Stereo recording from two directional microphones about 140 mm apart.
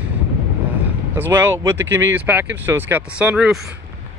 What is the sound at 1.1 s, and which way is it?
Speech, 15° right (ahead or behind).